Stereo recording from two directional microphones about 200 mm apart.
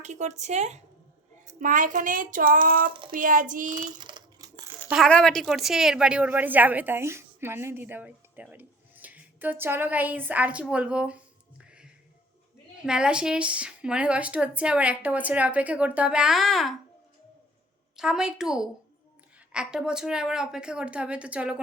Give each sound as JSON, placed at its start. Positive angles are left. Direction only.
{"t": 0.0, "sound": "speech", "side_deg": -35}
{"t": 3.9, "sound": "coin", "side_deg": -20}
{"t": 4.9, "sound": "a woman's voice", "side_deg": 0}
{"t": 17.9, "sound": "a woman's voice", "side_deg": -5}